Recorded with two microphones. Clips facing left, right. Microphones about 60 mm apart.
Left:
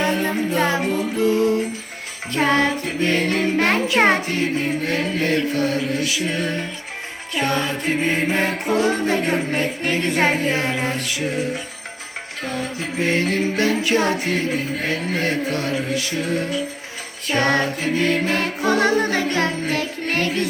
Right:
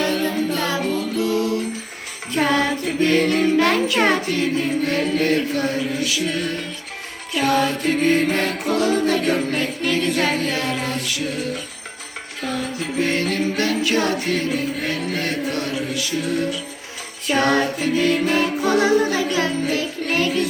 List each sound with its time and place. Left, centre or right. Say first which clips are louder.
0.0 s music: even; left
6.1 s music: even; centre
12.5 s music: right 2 dB; left